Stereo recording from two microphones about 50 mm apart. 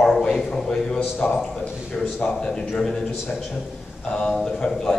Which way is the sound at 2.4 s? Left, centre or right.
Centre.